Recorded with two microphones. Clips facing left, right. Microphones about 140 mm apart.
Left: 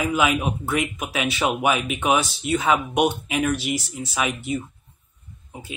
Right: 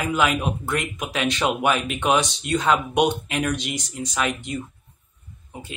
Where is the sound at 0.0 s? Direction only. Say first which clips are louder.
Left 1 dB; 5° left (ahead or behind).